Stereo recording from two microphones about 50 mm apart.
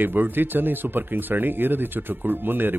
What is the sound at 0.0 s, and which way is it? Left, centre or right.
A man's voice, right.